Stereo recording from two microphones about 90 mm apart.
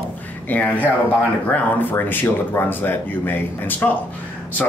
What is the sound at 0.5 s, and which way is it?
Speech, 15° left (ahead or behind).